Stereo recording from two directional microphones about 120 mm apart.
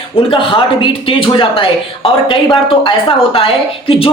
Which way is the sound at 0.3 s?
45° left (ahead or behind).